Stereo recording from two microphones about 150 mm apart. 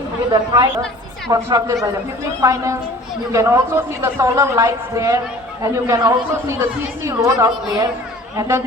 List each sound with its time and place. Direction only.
0.3 s a man's voice: 30° right (ahead or behind)